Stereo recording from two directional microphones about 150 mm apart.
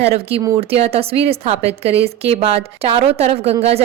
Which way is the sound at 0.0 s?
40° right (ahead or behind).